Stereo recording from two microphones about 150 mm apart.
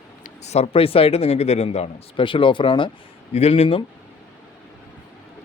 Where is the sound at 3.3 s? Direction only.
45° left (ahead or behind).